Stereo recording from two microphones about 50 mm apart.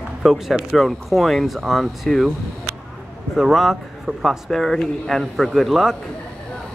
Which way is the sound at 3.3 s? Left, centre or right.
Centre.